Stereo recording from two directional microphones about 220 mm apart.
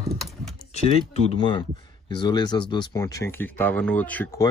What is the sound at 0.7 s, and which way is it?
Speech, 30° left (ahead or behind).